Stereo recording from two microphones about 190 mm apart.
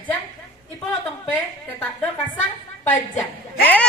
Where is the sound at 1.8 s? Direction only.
10° left (ahead or behind).